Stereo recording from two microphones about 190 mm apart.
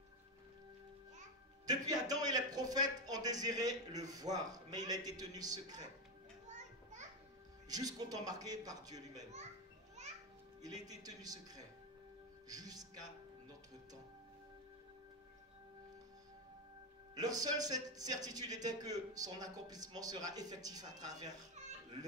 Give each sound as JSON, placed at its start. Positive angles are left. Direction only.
{"t": 1.7, "sound": "a man's voice", "side_deg": -20}
{"t": 6.4, "sound": "children playing", "side_deg": -40}
{"t": 7.6, "sound": "a man's voice", "side_deg": -20}
{"t": 9.2, "sound": "a child's voice", "side_deg": -35}
{"t": 10.9, "sound": "a man's voice", "side_deg": -20}
{"t": 17.1, "sound": "a man's voice", "side_deg": -20}